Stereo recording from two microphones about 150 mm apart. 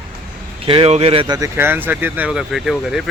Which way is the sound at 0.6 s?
40° right (ahead or behind).